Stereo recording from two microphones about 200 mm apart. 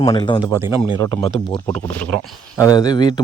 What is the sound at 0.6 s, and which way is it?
Speech, 15° right (ahead or behind).